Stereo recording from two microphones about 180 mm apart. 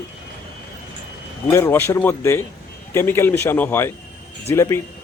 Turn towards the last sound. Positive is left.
turn(degrees=15)  # may be behind; listen again after turning